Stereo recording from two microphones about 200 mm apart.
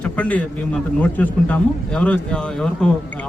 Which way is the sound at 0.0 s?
5° left (ahead or behind).